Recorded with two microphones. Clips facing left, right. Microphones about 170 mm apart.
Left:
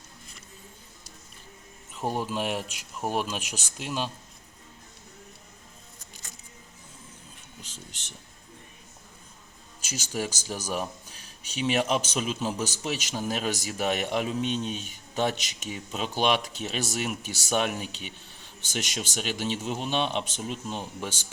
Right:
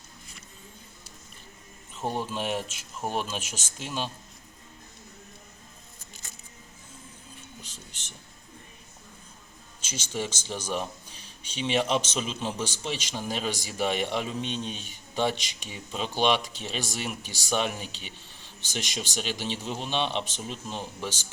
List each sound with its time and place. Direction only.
2.0 s speech: 10° left (ahead or behind)
7.6 s a sound: 10° right (ahead or behind)
9.8 s speech: 5° left (ahead or behind)